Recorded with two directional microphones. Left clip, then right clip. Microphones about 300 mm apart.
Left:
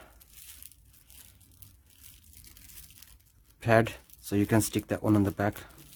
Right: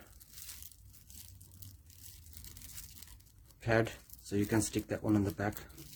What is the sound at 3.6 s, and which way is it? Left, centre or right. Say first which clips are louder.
Speech: left 7 dB; left.